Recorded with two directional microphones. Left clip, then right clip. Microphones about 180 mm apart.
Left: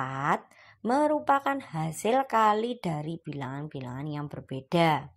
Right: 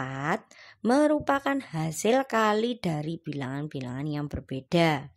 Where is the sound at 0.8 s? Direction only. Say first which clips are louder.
Right 1 dB; 30° right (ahead or behind).